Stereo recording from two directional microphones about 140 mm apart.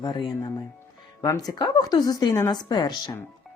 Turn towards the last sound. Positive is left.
turn(degrees=30)  # may be behind; listen again after turning